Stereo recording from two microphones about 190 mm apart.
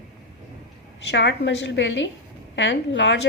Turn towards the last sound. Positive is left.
turn(degrees=65)  # may be behind; listen again after turning